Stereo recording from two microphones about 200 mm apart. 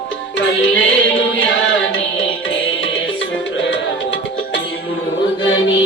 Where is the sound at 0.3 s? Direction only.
65° left (ahead or behind).